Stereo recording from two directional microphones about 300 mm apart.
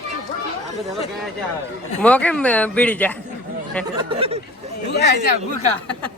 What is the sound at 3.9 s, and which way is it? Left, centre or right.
Speech, centre.